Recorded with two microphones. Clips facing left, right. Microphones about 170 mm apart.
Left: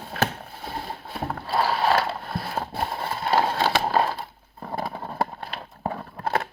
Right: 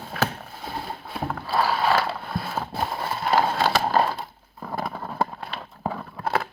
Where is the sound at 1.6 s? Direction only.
25° left (ahead or behind).